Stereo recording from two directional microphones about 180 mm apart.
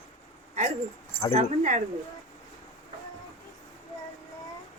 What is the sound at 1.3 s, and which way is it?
Speech, 40° right (ahead or behind).